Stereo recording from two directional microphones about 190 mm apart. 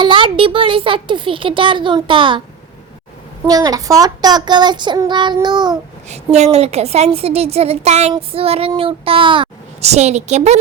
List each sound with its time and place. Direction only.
0.0 s a child's voice: 25° right (ahead or behind)
3.4 s a child's voice: 20° right (ahead or behind)
6.1 s speech: 35° right (ahead or behind)